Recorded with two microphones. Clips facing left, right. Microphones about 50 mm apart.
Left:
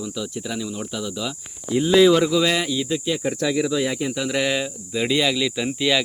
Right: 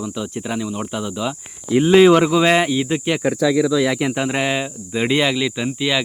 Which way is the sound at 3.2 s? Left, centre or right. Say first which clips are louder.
Right 5 dB; right.